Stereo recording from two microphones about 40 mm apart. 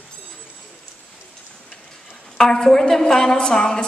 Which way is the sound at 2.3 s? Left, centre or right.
Centre.